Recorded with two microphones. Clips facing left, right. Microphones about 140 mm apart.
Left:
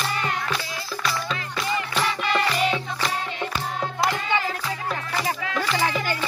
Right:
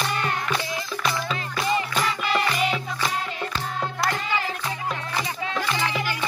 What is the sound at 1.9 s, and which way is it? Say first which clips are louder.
Music: even; 10° right (ahead or behind).